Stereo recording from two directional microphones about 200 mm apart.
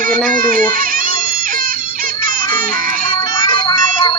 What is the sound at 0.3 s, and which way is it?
Speech, 45° right (ahead or behind).